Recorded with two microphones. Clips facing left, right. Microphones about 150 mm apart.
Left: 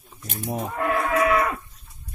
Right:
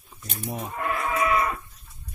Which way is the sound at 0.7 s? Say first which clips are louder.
Left 5 dB; 55° left (ahead or behind).